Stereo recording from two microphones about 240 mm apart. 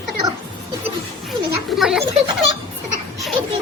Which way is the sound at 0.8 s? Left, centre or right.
Centre.